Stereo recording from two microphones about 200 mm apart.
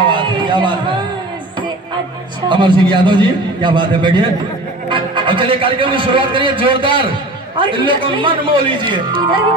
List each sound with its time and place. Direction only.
0.0 s music: 25° right (ahead or behind)
2.5 s a man's voice: 25° right (ahead or behind)